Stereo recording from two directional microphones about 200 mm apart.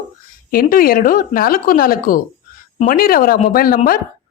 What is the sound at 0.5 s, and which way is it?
Speech, 45° left (ahead or behind).